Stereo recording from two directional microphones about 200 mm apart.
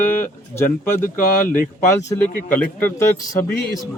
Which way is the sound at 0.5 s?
10° left (ahead or behind).